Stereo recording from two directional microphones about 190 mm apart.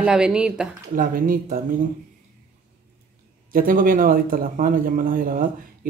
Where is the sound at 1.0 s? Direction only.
45° right (ahead or behind).